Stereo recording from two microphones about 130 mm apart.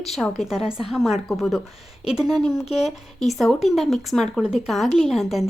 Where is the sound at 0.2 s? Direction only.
Centre (ahead or behind).